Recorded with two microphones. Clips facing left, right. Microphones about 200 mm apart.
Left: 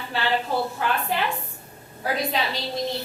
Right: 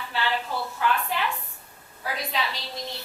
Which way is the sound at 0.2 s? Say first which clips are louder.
Left 4 dB; 35° left (ahead or behind).